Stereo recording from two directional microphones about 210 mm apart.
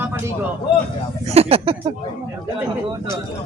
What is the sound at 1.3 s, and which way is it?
Speech, 30° right (ahead or behind).